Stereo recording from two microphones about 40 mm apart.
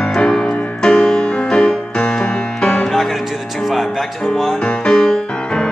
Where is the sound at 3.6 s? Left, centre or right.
Centre.